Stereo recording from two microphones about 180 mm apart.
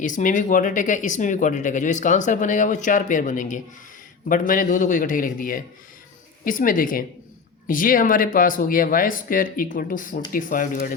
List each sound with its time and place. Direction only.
0.0 s speech: 45° left (ahead or behind)